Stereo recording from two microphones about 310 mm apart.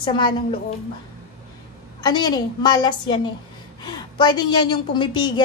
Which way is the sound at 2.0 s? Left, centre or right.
Centre.